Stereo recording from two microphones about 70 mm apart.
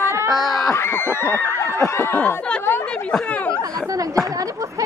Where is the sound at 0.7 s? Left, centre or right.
Left.